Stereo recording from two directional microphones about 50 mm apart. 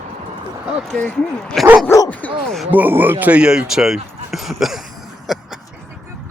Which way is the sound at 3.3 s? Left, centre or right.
Centre.